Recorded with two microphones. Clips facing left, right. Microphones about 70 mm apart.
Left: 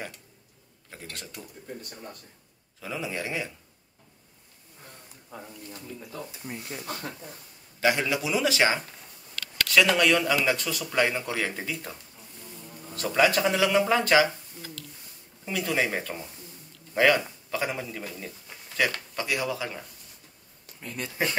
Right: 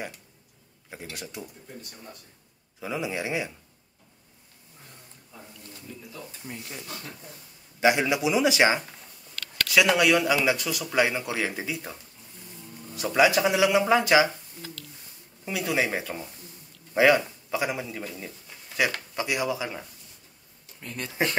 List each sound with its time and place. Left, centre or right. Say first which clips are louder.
0.8 s speech: right 3 dB; centre
2.8 s speech: right 3 dB; centre
5.3 s a sound: left 6 dB; left
6.3 s speech: left 2 dB; centre
7.8 s speech: right 3 dB; centre
15.4 s speech: right 1 dB; centre
18.9 s speech: right 1 dB; centre
20.8 s speech: even; centre